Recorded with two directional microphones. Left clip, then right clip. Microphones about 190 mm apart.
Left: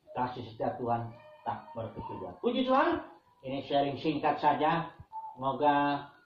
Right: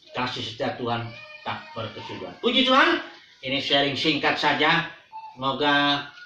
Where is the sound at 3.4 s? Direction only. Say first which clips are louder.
Right 8 dB; 25° right (ahead or behind).